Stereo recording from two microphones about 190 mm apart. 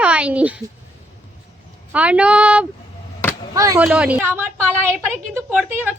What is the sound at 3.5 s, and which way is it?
Speech, 15° right (ahead or behind).